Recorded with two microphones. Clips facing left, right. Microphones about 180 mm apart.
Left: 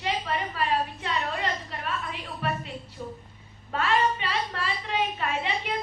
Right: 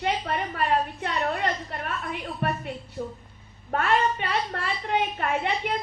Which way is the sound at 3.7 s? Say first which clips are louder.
Right 1 dB; 55° right (ahead or behind).